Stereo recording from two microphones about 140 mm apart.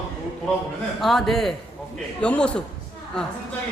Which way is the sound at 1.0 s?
Centre (ahead or behind).